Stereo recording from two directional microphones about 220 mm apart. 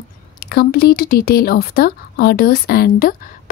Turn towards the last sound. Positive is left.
turn(degrees=40)  # may be behind; listen again after turning